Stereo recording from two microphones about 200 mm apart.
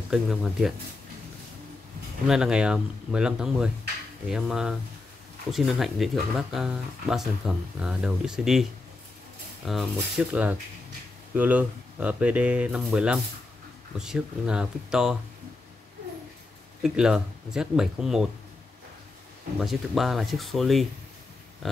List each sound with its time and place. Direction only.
0.1 s speech: centre (ahead or behind)
2.2 s speech: 5° right (ahead or behind)
9.7 s speech: centre (ahead or behind)
16.8 s speech: 5° right (ahead or behind)
19.6 s speech: centre (ahead or behind)